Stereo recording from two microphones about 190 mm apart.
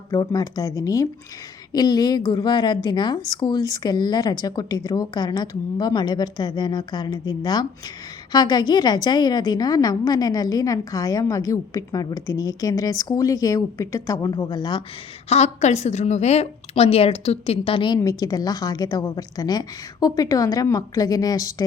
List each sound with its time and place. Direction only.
0.1 s a woman's voice: 20° left (ahead or behind)
15.3 s a woman's voice: 35° left (ahead or behind); by 21.5 s 20° left (ahead or behind)